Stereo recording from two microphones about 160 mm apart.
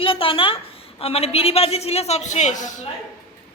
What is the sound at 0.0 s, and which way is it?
A woman's voice, 35° left (ahead or behind).